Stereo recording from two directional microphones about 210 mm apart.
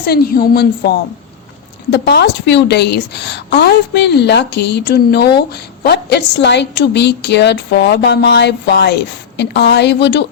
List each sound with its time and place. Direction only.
0.0 s a woman's voice: 45° left (ahead or behind)